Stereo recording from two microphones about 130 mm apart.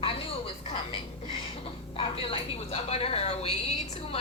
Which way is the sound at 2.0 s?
45° left (ahead or behind).